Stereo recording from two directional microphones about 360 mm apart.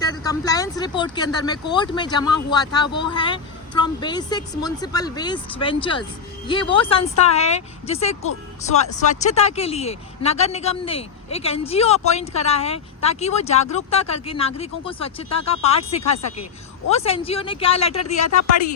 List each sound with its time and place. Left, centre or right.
0.0 s speech: centre
18.0 s speech: left